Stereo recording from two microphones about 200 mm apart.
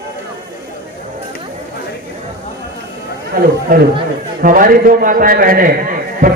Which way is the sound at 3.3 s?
45° right (ahead or behind).